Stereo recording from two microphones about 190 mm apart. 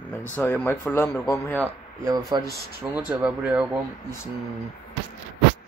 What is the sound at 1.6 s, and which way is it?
A man's voice, 15° right (ahead or behind).